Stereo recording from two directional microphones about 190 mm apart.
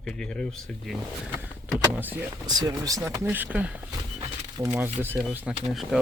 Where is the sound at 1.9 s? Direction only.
10° right (ahead or behind).